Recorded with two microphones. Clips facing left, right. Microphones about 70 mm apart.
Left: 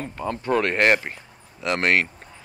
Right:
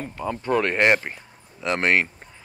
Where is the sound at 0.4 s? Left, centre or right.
Centre.